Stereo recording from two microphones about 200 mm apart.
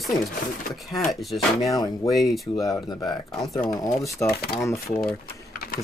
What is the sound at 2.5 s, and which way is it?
Speech, 15° left (ahead or behind).